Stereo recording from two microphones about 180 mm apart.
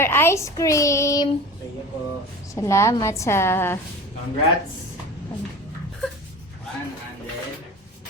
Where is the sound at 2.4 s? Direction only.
15° left (ahead or behind).